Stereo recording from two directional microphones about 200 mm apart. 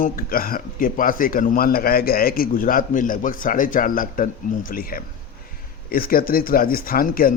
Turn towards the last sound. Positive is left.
turn(degrees=45)  # may be behind; listen again after turning